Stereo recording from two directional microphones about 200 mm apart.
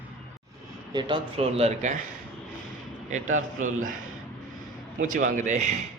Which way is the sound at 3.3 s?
40° right (ahead or behind).